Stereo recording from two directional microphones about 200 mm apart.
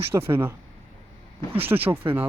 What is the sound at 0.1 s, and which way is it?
Speech, 10° right (ahead or behind).